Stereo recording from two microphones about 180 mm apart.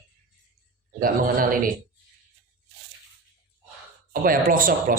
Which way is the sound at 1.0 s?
50° right (ahead or behind).